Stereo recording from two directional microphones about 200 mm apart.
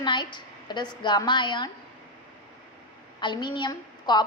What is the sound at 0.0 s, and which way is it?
A woman's voice, 25° left (ahead or behind).